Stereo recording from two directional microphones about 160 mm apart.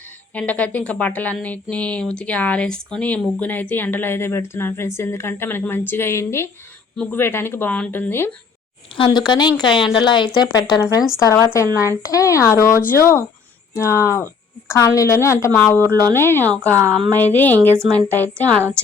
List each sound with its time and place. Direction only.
0.3 s speech: 10° left (ahead or behind)
9.0 s speech: 30° left (ahead or behind); by 16.6 s 15° left (ahead or behind)
16.6 s a woman's voice: 15° right (ahead or behind)
17.2 s speech: 10° left (ahead or behind)